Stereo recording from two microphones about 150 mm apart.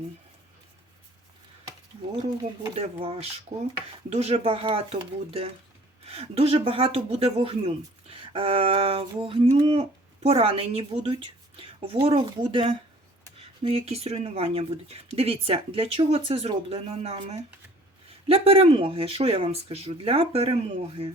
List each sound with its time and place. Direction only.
2.7 s a woman's voice: 45° right (ahead or behind)